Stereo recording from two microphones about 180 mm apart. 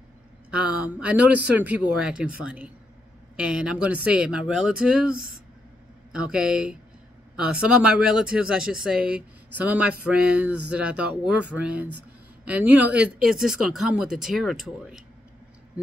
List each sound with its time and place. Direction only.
0.5 s speech: 5° right (ahead or behind)
5.1 s speech: 55° right (ahead or behind)
6.1 s speech: 5° right (ahead or behind)